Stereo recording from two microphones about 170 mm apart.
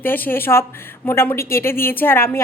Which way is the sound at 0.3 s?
15° left (ahead or behind).